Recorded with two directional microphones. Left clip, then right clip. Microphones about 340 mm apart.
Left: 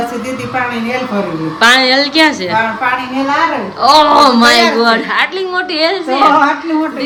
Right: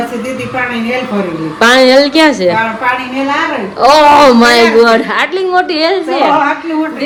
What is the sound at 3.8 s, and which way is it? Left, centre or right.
A woman's voice, centre.